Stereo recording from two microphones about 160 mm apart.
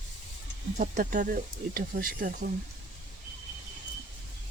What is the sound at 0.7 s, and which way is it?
Speech, 50° right (ahead or behind).